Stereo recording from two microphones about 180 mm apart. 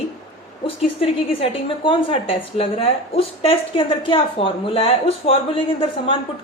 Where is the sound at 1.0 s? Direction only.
30° left (ahead or behind).